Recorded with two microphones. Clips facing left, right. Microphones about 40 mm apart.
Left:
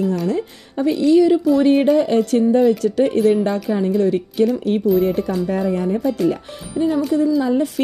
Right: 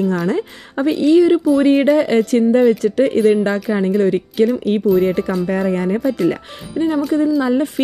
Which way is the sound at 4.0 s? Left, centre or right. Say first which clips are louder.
Right 2 dB; right.